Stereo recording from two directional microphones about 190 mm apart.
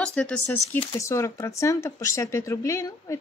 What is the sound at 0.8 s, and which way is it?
Speech, 20° left (ahead or behind).